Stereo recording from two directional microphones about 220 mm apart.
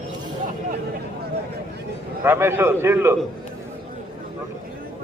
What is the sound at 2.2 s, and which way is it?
Speech, 10° right (ahead or behind).